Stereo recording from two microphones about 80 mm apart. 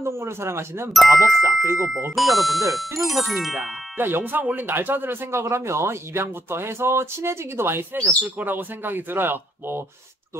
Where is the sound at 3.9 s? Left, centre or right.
Right.